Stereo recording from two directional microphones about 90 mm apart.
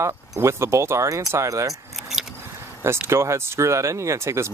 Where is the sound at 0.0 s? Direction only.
30° right (ahead or behind).